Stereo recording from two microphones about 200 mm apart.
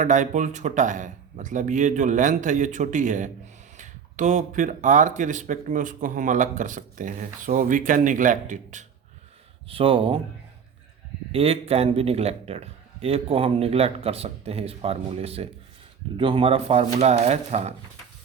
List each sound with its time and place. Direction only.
0.0 s speech: 40° right (ahead or behind)
9.6 s a man's voice: 25° right (ahead or behind)
11.3 s a man's voice: 30° right (ahead or behind)